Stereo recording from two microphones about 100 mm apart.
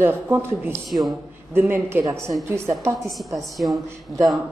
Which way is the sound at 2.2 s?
Centre (ahead or behind).